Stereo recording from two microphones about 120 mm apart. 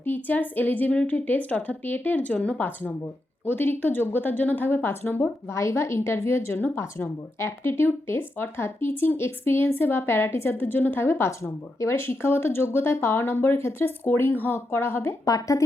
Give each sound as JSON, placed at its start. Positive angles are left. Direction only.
{"t": 0.0, "sound": "a woman's voice", "side_deg": 15}